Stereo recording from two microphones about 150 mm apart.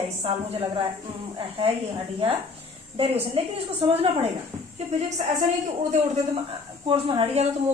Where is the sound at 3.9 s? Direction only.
45° right (ahead or behind).